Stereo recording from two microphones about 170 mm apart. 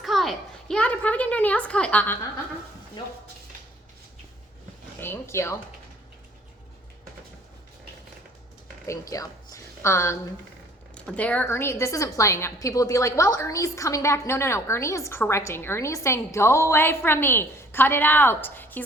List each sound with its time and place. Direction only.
0.0 s a child's voice: centre (ahead or behind)
4.9 s a sound: 15° left (ahead or behind)
8.9 s a woman's voice: 20° left (ahead or behind)